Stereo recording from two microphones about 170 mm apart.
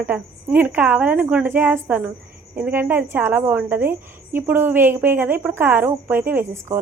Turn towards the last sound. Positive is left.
turn(degrees=-15)  # may be behind; listen again after turning